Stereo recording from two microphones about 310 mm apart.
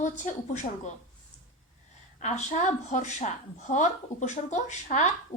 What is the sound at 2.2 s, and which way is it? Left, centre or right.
Speech, left.